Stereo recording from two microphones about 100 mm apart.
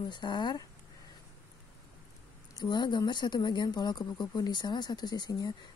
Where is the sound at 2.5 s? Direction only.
50° left (ahead or behind).